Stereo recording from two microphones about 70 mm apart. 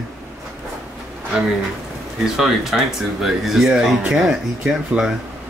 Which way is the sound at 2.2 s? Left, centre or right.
Centre.